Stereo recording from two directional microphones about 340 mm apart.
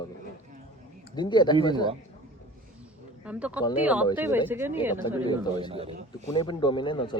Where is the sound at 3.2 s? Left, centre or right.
Centre.